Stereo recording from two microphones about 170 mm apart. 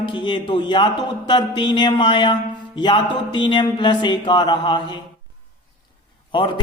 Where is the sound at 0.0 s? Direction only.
30° left (ahead or behind).